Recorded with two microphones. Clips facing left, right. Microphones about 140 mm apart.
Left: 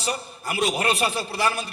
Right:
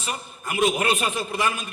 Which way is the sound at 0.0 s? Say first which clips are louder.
Left 3 dB; 35° left (ahead or behind).